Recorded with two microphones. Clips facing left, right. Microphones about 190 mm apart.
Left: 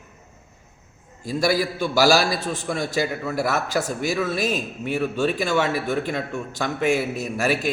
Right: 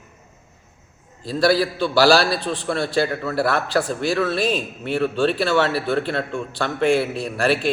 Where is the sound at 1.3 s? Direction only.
10° left (ahead or behind).